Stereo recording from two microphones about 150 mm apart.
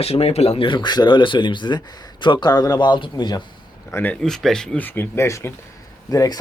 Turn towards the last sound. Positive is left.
turn(degrees=20)  # may be behind; listen again after turning